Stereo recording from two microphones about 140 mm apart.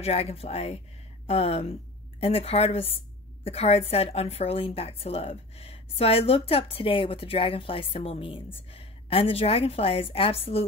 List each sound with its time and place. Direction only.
0.0 s a woman's voice: 45° left (ahead or behind)